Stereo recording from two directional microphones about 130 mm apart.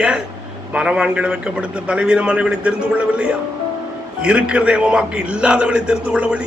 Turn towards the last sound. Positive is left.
turn(degrees=-10)  # may be behind; listen again after turning